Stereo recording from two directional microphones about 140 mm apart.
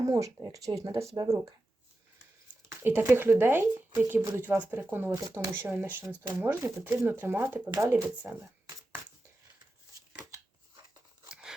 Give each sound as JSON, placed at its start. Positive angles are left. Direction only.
{"t": 0.0, "sound": "speech", "side_deg": -25}
{"t": 2.6, "sound": "speech", "side_deg": -15}
{"t": 11.3, "sound": "a sound", "side_deg": -5}